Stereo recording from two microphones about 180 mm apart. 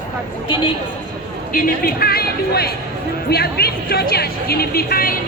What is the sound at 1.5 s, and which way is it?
Speech, 55° left (ahead or behind).